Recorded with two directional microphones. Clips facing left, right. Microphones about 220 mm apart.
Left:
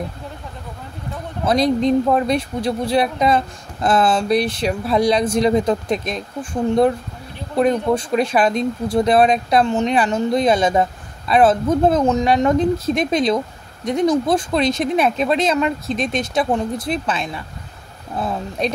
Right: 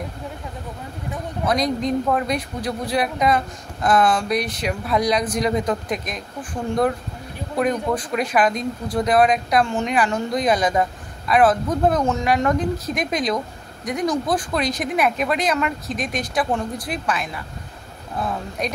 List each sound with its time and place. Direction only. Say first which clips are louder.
1.4 s speech: left 5 dB; 30° left (ahead or behind)
7.5 s speech: left 5 dB; 25° left (ahead or behind)
18.6 s speech: left 5 dB; 25° left (ahead or behind)